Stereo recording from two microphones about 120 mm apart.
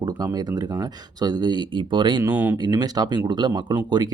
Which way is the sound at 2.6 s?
35° right (ahead or behind).